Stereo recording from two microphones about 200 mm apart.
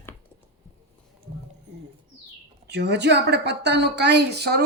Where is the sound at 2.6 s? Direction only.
60° right (ahead or behind).